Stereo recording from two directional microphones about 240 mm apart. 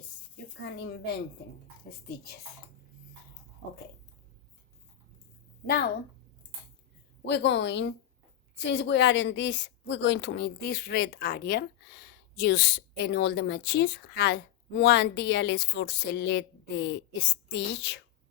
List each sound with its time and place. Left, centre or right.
0.8 s a woman's voice: left
7.3 s a woman's voice: left